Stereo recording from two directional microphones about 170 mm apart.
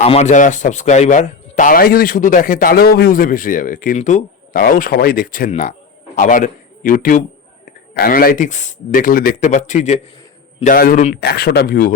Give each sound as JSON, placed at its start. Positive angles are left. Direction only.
{"t": 0.0, "sound": "speech", "side_deg": 40}
{"t": 5.5, "sound": "a man's voice", "side_deg": 45}